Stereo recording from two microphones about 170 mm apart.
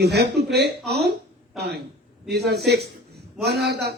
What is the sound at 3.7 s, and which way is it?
Speech, 75° right (ahead or behind).